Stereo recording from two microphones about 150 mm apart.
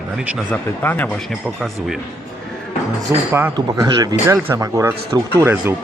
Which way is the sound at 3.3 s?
15° right (ahead or behind).